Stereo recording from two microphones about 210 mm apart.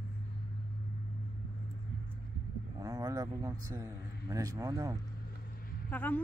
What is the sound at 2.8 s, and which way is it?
Speech, 15° right (ahead or behind).